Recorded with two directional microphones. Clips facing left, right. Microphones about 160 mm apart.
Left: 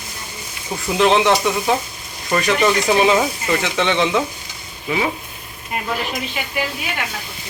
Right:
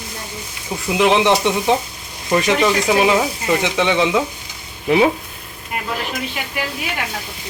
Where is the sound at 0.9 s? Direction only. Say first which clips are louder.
Even; 10° right (ahead or behind).